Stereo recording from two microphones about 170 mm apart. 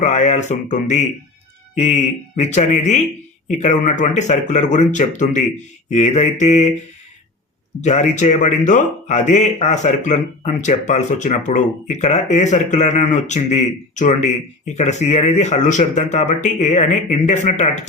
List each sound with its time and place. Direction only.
0.0 s speech: 45° left (ahead or behind)
7.8 s speech: 45° left (ahead or behind)